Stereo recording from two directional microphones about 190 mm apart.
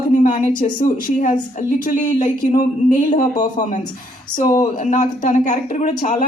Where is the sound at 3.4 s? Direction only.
40° left (ahead or behind).